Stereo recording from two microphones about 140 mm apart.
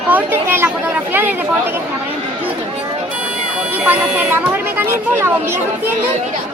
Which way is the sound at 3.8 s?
10° right (ahead or behind).